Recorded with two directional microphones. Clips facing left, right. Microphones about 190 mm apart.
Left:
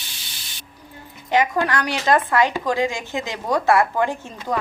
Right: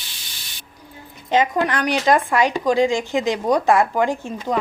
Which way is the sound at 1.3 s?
20° right (ahead or behind).